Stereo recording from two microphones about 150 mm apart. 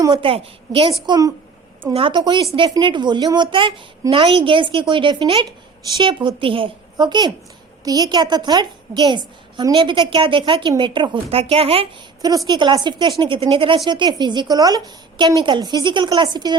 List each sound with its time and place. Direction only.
0.0 s a woman's voice: 35° right (ahead or behind)
1.0 s a woman's voice: 30° right (ahead or behind)